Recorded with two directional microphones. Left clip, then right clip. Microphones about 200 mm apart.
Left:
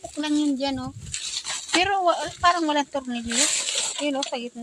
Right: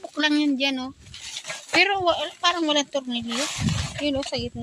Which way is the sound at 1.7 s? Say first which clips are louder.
Right 1 dB; 20° right (ahead or behind).